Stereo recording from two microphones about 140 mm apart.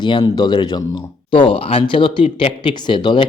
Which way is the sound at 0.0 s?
30° left (ahead or behind).